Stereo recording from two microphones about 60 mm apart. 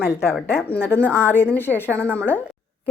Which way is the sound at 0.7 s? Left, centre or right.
Left.